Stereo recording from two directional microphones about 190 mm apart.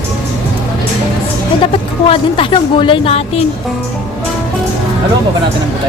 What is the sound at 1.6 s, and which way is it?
A woman's voice, 30° left (ahead or behind).